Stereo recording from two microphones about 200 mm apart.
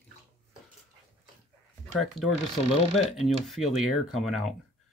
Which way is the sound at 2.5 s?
30° left (ahead or behind).